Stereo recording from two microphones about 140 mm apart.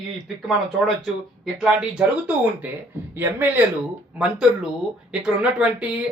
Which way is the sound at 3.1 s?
15° right (ahead or behind).